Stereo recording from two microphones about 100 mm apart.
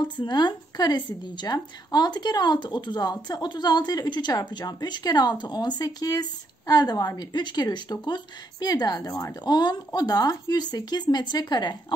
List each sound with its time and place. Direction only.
0.0 s a woman's voice: 50° left (ahead or behind)